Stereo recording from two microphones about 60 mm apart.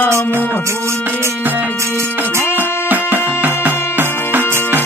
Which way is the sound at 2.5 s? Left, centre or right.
Right.